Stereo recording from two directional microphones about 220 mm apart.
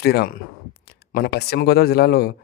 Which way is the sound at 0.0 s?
45° left (ahead or behind).